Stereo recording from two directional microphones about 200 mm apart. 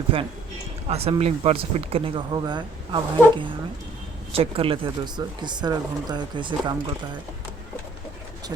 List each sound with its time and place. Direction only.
0.1 s speech: 25° right (ahead or behind)